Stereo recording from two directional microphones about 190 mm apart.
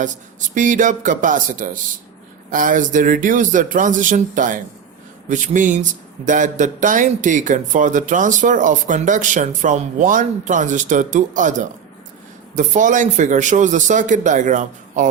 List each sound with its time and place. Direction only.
0.0 s speech: 40° right (ahead or behind)